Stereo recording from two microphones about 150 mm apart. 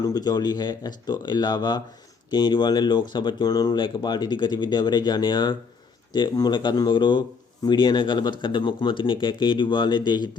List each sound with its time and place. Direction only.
0.0 s speech: 25° left (ahead or behind)